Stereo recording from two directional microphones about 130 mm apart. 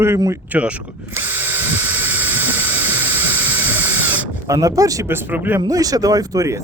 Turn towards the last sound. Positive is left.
turn(degrees=-25)  # may be behind; listen again after turning